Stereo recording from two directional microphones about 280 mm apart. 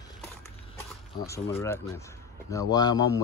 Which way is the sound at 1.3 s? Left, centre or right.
Centre.